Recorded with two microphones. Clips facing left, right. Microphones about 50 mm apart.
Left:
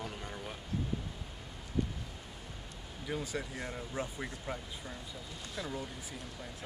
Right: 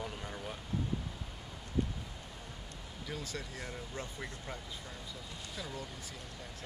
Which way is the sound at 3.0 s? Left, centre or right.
Centre.